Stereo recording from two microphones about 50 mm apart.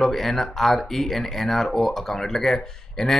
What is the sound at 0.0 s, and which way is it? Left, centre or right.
Speech, centre.